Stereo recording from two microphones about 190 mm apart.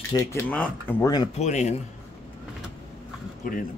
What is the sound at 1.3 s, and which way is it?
Speech, 35° left (ahead or behind).